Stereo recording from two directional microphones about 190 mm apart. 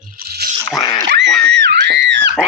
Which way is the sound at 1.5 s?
65° right (ahead or behind).